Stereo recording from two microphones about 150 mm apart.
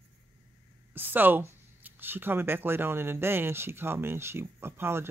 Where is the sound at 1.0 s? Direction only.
10° right (ahead or behind).